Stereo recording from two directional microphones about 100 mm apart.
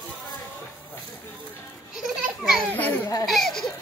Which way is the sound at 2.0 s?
5° right (ahead or behind).